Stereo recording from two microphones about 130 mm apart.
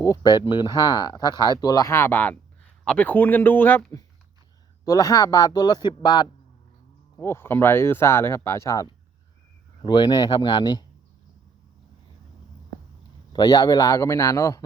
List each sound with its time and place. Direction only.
0.0 s speech: 25° left (ahead or behind)
4.9 s speech: 25° left (ahead or behind)
7.2 s speech: 20° left (ahead or behind)
13.3 s speech: 35° left (ahead or behind)